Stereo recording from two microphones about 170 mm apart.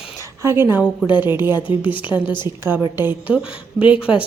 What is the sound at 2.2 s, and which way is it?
Speech, 25° left (ahead or behind).